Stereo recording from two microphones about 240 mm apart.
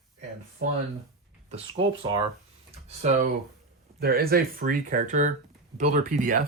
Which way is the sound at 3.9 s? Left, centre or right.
Right.